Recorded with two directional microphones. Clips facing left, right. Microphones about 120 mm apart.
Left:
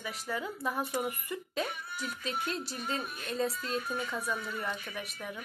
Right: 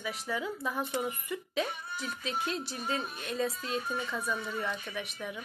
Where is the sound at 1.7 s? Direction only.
30° right (ahead or behind).